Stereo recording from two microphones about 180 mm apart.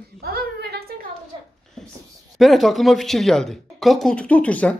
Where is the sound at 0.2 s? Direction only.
60° right (ahead or behind).